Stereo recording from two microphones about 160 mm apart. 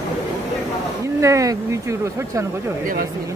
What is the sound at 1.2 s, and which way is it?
Speech, 20° right (ahead or behind).